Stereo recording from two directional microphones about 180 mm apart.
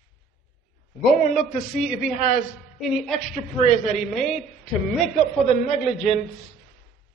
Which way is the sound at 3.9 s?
Centre (ahead or behind).